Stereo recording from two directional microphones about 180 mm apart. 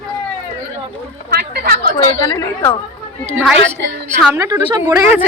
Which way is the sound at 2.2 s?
20° left (ahead or behind).